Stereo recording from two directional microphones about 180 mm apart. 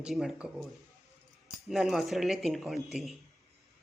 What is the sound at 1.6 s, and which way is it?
Speech, centre (ahead or behind).